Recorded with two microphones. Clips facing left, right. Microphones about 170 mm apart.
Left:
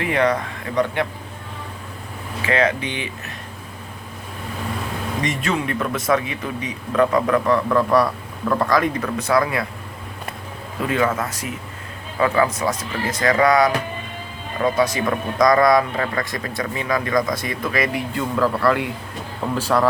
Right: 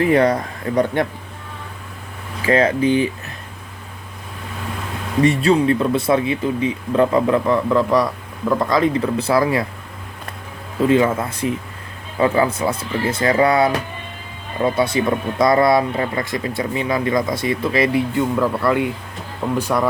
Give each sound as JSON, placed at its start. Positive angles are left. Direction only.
{"t": 0.0, "sound": "speech", "side_deg": -35}
{"t": 2.5, "sound": "speech", "side_deg": -35}
{"t": 5.2, "sound": "speech", "side_deg": -35}
{"t": 10.8, "sound": "speech", "side_deg": -25}